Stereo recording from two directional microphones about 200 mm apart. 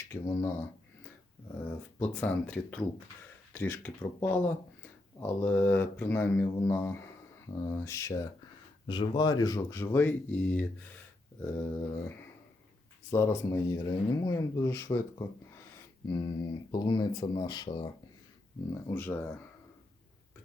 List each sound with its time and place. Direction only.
0.1 s speech: 15° left (ahead or behind)
2.0 s speech: 10° left (ahead or behind)
18.9 s speech: 10° left (ahead or behind)